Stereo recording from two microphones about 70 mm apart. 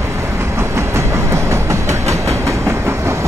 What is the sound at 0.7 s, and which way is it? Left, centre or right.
Train, right.